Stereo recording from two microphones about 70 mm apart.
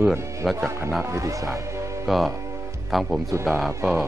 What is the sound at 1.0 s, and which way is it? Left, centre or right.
Speech, right.